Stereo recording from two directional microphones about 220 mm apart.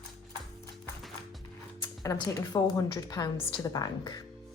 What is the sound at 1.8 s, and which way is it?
A woman's voice, 15° left (ahead or behind).